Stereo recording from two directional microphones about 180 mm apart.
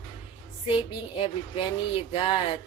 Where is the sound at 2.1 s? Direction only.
30° left (ahead or behind).